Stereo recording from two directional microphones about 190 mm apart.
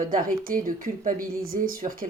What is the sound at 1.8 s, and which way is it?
Speech, 30° right (ahead or behind).